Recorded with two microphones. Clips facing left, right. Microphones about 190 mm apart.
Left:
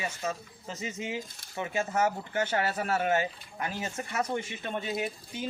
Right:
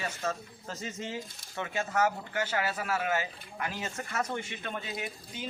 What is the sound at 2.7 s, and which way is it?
Speech, 35° left (ahead or behind).